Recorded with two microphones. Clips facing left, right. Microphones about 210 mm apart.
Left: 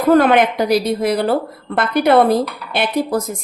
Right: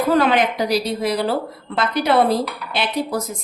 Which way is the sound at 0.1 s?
55° left (ahead or behind).